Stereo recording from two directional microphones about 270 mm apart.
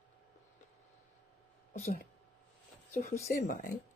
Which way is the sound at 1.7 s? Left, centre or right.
Left.